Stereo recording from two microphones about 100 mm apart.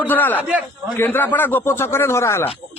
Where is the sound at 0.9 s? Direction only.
20° left (ahead or behind).